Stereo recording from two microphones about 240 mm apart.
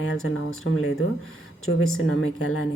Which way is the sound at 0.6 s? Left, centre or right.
Left.